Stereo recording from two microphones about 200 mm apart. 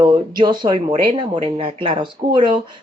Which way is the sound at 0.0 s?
20° right (ahead or behind).